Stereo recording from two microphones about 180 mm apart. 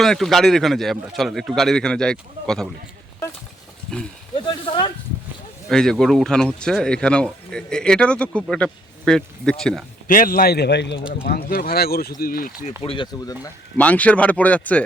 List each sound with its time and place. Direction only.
0.0 s speech: centre (ahead or behind)
4.4 s speech: 30° left (ahead or behind)
5.6 s speech: 5° left (ahead or behind)
10.1 s a man's voice: 50° left (ahead or behind); by 11.0 s 70° left (ahead or behind)
11.3 s a man's voice: 55° left (ahead or behind)
12.8 s speech: 25° left (ahead or behind)
13.4 s speech: 10° left (ahead or behind)